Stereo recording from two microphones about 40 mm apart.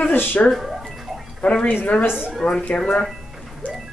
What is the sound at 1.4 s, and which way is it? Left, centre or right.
Speech, left.